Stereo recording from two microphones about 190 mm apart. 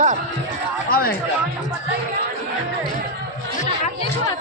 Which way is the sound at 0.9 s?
50° left (ahead or behind).